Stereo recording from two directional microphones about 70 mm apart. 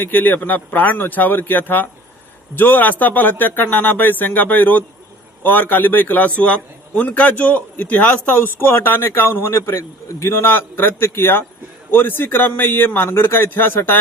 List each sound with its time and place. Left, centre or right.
0.0 s a man's voice: left